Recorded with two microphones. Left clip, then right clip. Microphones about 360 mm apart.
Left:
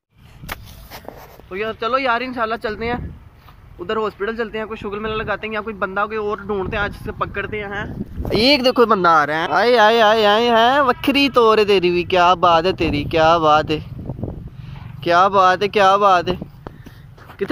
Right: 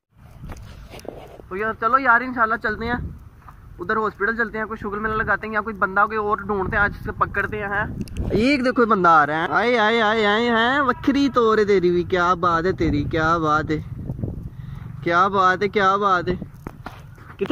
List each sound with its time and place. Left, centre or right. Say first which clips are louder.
1.5 s speech: right 1 dB; centre
15.0 s speech: left 4 dB; centre
17.4 s speech: left 2 dB; centre